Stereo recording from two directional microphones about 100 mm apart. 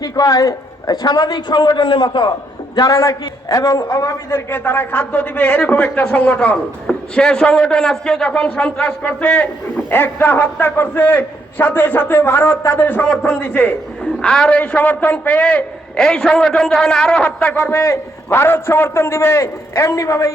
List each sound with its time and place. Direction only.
0.0 s a man's voice: 40° left (ahead or behind)
2.7 s a man's voice: 35° left (ahead or behind)
4.4 s a man's voice: 20° left (ahead or behind)
17.5 s a man's voice: 25° left (ahead or behind)